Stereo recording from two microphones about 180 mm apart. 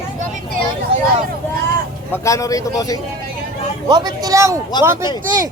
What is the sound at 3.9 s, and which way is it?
Speech, 25° right (ahead or behind).